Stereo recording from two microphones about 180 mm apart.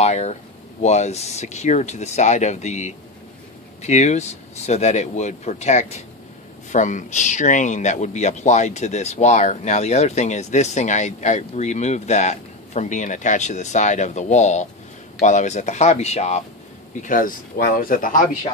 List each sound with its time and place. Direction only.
0.0 s speech: 40° left (ahead or behind)
17.0 s speech: 50° left (ahead or behind)